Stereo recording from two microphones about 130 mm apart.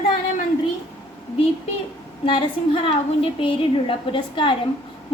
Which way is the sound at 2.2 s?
40° left (ahead or behind).